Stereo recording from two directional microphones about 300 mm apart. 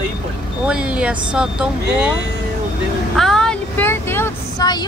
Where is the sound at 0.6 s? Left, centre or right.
Centre.